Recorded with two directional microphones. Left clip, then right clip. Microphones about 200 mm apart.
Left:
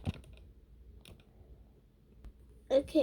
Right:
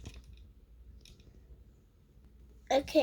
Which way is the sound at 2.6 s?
15° right (ahead or behind).